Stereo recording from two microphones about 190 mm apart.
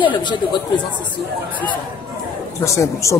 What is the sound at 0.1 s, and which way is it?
Speech, 25° left (ahead or behind).